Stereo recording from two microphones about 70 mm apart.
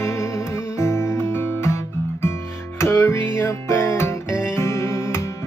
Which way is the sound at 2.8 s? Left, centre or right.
Left.